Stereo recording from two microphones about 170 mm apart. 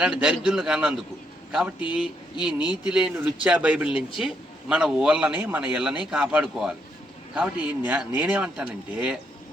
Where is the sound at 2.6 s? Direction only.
25° left (ahead or behind).